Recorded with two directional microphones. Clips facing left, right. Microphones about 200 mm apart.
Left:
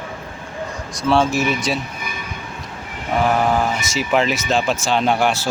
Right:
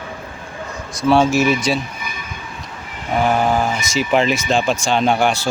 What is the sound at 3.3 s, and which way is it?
Speech, centre (ahead or behind).